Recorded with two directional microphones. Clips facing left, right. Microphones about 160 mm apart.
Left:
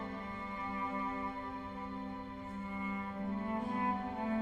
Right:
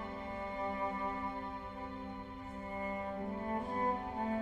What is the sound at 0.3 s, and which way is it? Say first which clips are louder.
Music: right 4 dB; 35° right (ahead or behind).